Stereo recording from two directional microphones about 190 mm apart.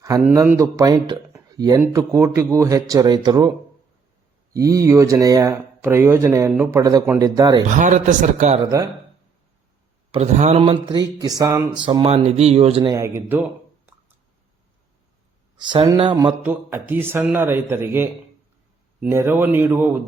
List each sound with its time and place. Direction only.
0.0 s speech: 15° right (ahead or behind)
4.5 s speech: 15° right (ahead or behind)
7.7 s speech: 40° right (ahead or behind)
10.1 s speech: 35° right (ahead or behind)
10.6 s speech: 25° right (ahead or behind)
11.9 s speech: 30° right (ahead or behind)
12.9 s speech: 15° right (ahead or behind)
15.5 s speech: 25° right (ahead or behind)
16.4 s speech: 10° right (ahead or behind)